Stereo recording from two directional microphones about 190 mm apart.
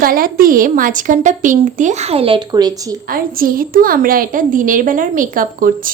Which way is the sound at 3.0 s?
50° right (ahead or behind).